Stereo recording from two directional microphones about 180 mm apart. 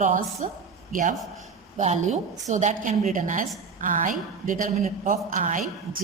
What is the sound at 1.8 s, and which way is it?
A woman's voice, 40° right (ahead or behind).